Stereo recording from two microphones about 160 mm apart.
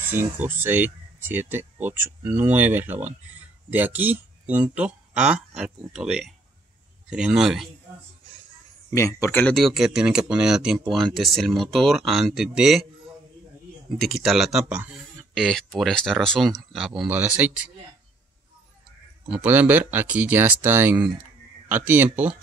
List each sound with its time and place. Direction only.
0.1 s speech: 10° right (ahead or behind)
8.9 s speech: 20° left (ahead or behind)
9.5 s speech: centre (ahead or behind)
13.9 s speech: centre (ahead or behind)
19.2 s speech: 10° right (ahead or behind)